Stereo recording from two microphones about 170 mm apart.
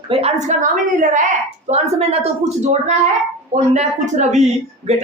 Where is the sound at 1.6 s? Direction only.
40° right (ahead or behind).